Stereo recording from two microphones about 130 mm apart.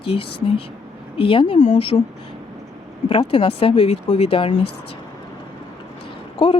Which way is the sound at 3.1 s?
45° left (ahead or behind).